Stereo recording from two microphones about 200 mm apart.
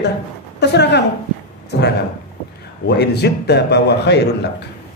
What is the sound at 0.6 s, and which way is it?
Speech, 55° left (ahead or behind).